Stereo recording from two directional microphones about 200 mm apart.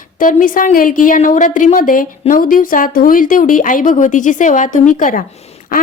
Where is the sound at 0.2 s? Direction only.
40° left (ahead or behind).